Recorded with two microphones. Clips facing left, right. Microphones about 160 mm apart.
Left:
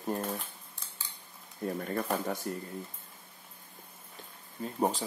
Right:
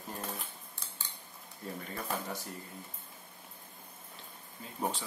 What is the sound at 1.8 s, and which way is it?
Speech, 50° left (ahead or behind).